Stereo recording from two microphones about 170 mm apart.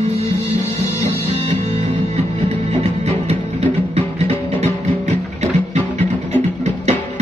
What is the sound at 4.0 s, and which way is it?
Music, 40° right (ahead or behind).